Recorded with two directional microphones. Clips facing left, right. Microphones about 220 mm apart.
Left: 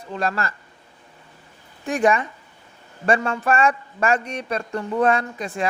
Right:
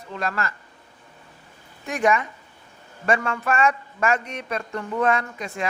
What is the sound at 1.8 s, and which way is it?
A man's voice, 30° left (ahead or behind).